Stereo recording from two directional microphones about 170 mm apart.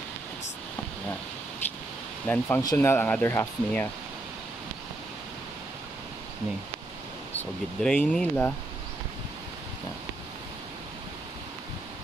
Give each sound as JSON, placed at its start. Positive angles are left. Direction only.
{"t": 2.2, "sound": "speech", "side_deg": 10}
{"t": 7.8, "sound": "speech", "side_deg": 5}